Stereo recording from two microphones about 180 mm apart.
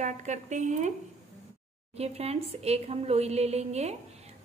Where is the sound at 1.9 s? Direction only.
35° right (ahead or behind).